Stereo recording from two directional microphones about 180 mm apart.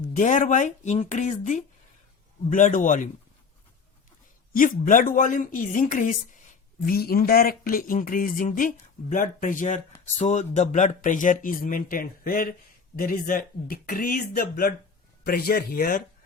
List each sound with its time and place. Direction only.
0.2 s speech: 45° left (ahead or behind)
4.5 s speech: 50° left (ahead or behind)